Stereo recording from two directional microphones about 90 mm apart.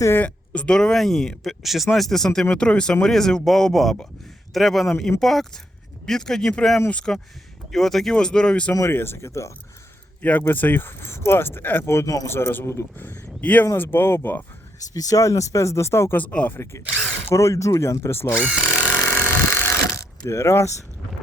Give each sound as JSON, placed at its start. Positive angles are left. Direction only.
{"t": 0.2, "sound": "speech", "side_deg": 15}
{"t": 8.9, "sound": "speech", "side_deg": 25}
{"t": 10.2, "sound": "speech", "side_deg": 20}
{"t": 13.4, "sound": "speech", "side_deg": 15}
{"t": 14.9, "sound": "speech", "side_deg": 40}
{"t": 16.2, "sound": "speech", "side_deg": 15}
{"t": 17.2, "sound": "speech", "side_deg": 30}
{"t": 18.3, "sound": "power tool", "side_deg": -5}
{"t": 19.1, "sound": "vehicle", "side_deg": 25}
{"t": 20.0, "sound": "speech", "side_deg": 30}